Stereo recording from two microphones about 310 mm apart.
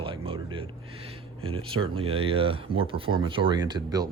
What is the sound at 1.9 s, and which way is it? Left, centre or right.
Speech, centre.